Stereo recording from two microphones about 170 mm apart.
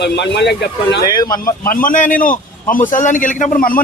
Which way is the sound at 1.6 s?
55° left (ahead or behind).